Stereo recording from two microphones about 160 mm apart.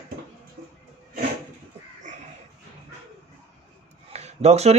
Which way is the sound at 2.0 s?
50° right (ahead or behind).